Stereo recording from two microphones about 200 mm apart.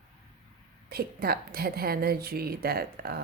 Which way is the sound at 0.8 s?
50° right (ahead or behind).